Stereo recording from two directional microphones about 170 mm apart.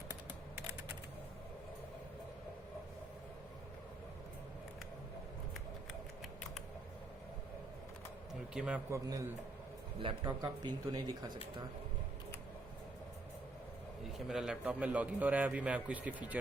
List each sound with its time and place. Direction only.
8.3 s a sound: 5° right (ahead or behind)
8.9 s speech: 20° right (ahead or behind)
14.3 s a man's voice: 5° right (ahead or behind)